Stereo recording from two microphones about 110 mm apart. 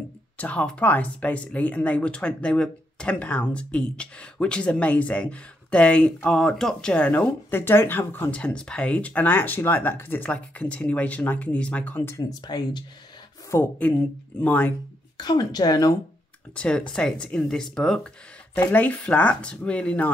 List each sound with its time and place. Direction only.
0.4 s speech: 10° left (ahead or behind)
12.2 s a woman's voice: 40° left (ahead or behind)
13.5 s speech: 15° left (ahead or behind)
15.1 s a woman's voice: 40° left (ahead or behind)
16.5 s speech: 10° left (ahead or behind)